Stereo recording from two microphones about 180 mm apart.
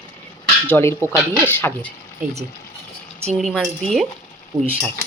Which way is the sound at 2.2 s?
5° right (ahead or behind).